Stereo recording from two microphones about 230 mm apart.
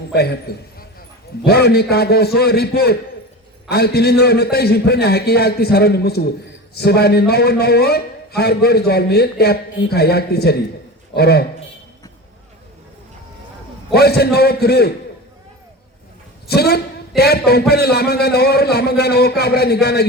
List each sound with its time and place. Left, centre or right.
0.1 s a man's voice: left
13.9 s a man's voice: left
16.5 s a man's voice: left